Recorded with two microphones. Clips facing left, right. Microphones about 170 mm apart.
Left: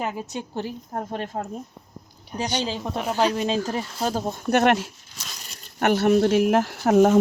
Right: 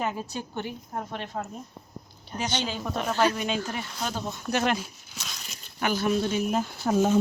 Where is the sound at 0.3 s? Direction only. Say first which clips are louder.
Left 3 dB; 35° left (ahead or behind).